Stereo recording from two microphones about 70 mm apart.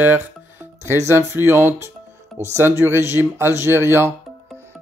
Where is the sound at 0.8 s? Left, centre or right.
Right.